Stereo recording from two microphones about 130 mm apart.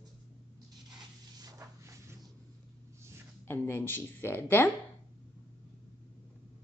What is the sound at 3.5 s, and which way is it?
Speech, 15° left (ahead or behind).